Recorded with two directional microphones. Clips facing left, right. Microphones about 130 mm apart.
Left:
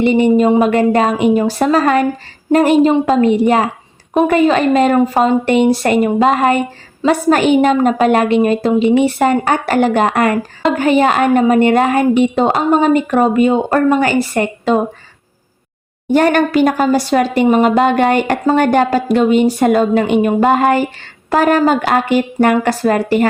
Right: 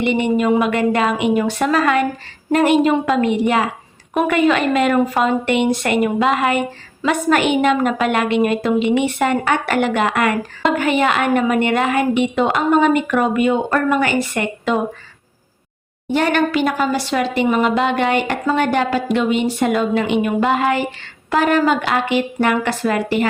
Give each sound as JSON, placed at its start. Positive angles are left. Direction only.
{"t": 0.0, "sound": "a woman's voice", "side_deg": 35}
{"t": 16.1, "sound": "a woman's voice", "side_deg": 45}